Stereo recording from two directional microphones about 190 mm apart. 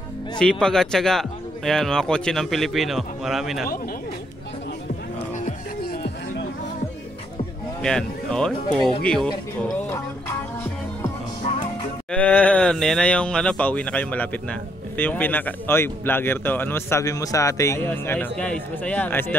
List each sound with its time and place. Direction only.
0.4 s speech: 5° left (ahead or behind)
5.3 s music: 45° left (ahead or behind)
7.8 s speech: 5° left (ahead or behind)
8.7 s music: 5° left (ahead or behind)
12.1 s speech: 5° left (ahead or behind)